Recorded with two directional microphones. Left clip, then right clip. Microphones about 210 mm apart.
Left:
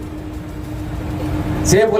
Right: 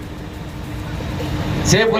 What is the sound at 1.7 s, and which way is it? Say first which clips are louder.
Speech: left 3 dB; 65° left (ahead or behind).